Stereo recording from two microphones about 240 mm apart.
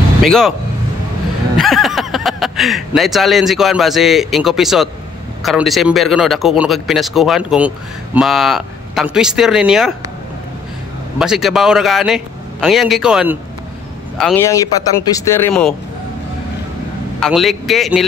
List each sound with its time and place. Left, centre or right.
0.2 s speech: centre
1.6 s speech: centre
11.1 s speech: centre
17.2 s speech: centre